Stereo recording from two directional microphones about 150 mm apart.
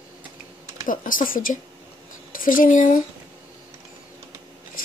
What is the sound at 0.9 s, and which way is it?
Speech, 65° left (ahead or behind).